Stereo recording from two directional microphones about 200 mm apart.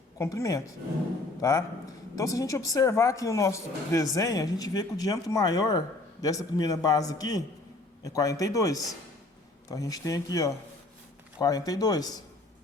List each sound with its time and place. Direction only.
0.2 s a man's voice: 15° left (ahead or behind)